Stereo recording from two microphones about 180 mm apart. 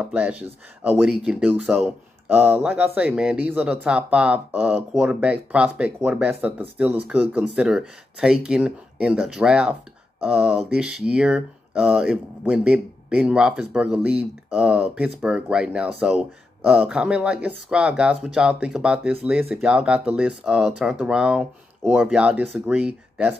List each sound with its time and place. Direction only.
0.0 s speech: 5° right (ahead or behind)